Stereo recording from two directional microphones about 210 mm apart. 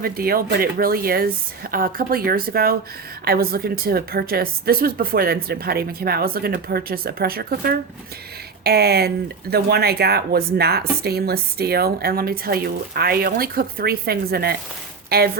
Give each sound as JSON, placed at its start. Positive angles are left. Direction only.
{"t": 0.0, "sound": "speech", "side_deg": -45}